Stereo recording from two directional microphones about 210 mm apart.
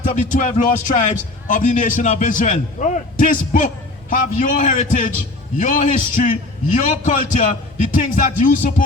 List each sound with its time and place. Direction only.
0.0 s a man's voice: 35° left (ahead or behind)